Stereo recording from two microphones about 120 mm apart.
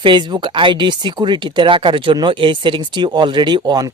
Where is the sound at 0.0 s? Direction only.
40° right (ahead or behind).